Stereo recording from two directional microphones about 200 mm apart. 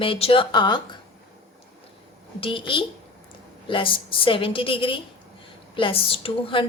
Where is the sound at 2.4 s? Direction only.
25° left (ahead or behind).